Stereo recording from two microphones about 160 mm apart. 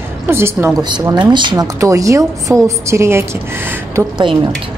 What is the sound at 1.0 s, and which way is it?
A woman's voice, 25° right (ahead or behind).